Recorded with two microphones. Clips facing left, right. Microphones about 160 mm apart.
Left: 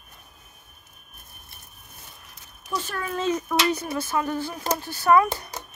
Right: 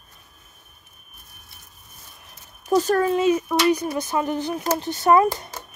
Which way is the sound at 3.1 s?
10° right (ahead or behind).